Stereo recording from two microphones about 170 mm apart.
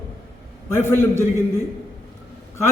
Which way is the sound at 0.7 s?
15° left (ahead or behind).